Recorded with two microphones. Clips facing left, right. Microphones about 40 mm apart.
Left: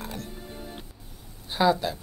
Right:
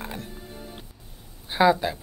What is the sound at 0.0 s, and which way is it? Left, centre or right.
Music, right.